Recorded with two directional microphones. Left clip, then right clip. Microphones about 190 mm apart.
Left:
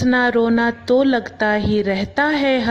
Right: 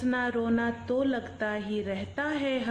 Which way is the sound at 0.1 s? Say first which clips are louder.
Left 13 dB; 45° left (ahead or behind).